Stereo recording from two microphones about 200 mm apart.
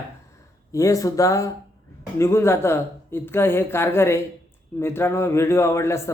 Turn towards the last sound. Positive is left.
turn(degrees=15)  # may be behind; listen again after turning